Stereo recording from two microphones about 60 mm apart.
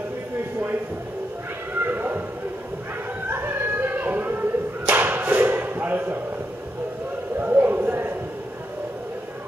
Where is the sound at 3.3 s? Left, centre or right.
Right.